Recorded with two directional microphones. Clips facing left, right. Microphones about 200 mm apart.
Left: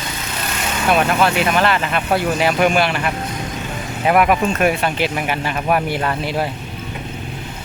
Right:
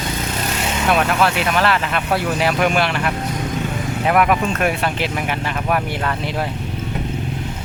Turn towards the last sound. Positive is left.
turn(degrees=5)  # may be behind; listen again after turning